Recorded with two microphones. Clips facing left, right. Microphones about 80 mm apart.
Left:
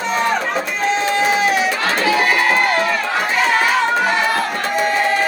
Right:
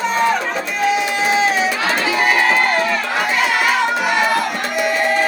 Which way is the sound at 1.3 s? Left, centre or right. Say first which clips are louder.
Even; right.